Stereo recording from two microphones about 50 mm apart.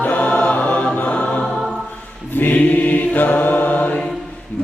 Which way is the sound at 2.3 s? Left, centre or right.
Left.